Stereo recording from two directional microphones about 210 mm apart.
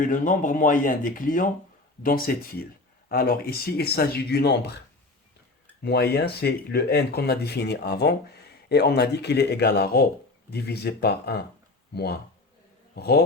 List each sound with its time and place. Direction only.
0.0 s speech: 40° left (ahead or behind)
5.8 s speech: 50° left (ahead or behind)